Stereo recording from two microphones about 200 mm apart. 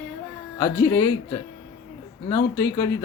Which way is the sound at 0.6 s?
20° left (ahead or behind).